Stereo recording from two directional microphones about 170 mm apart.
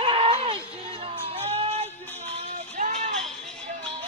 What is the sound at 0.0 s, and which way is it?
Music, 35° right (ahead or behind).